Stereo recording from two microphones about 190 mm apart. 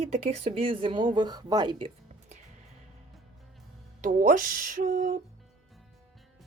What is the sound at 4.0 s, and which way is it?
Speech, 45° right (ahead or behind).